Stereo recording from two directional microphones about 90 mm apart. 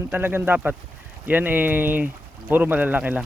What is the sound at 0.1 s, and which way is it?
Speech, 25° right (ahead or behind).